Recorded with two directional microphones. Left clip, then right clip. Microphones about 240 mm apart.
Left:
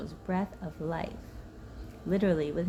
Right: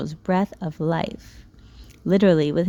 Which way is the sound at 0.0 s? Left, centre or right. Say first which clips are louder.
Right 11 dB; right.